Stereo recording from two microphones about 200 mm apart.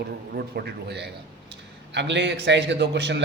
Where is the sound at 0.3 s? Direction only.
50° right (ahead or behind).